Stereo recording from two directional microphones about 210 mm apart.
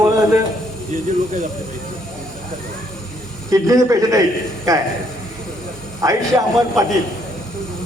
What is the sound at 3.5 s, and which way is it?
A woman's voice, 15° right (ahead or behind).